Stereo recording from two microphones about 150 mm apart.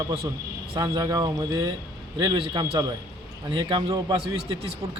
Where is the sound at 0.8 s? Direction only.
25° right (ahead or behind).